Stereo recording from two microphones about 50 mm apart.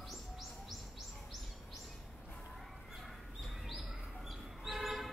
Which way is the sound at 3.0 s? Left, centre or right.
Centre.